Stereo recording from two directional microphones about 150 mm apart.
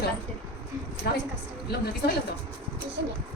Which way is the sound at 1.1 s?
90° left.